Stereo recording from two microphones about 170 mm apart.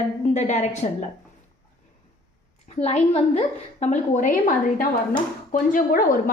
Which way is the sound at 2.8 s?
40° left (ahead or behind).